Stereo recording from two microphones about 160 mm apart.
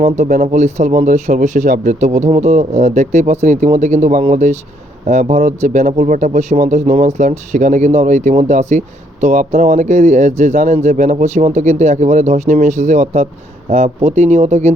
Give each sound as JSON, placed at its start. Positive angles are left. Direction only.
{"t": 0.4, "sound": "speech", "side_deg": -45}
{"t": 2.6, "sound": "speech", "side_deg": -55}
{"t": 11.2, "sound": "speech", "side_deg": -45}